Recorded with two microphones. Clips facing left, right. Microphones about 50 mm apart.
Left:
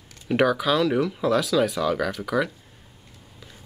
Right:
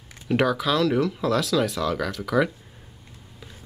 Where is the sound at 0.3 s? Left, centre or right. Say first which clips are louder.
Left 1 dB; centre.